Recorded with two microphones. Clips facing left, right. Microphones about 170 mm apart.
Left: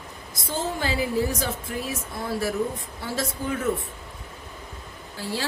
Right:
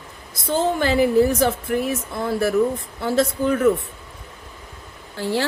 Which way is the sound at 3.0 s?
65° right (ahead or behind).